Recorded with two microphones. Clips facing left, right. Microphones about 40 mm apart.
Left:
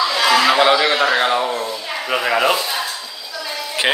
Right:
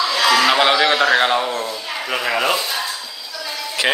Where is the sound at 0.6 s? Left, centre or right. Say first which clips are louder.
Left 1 dB; centre.